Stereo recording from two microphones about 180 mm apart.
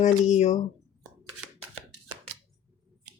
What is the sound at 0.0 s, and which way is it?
Speech, 40° left (ahead or behind).